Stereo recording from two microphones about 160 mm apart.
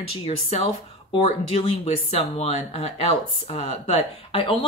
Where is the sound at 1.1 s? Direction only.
35° left (ahead or behind).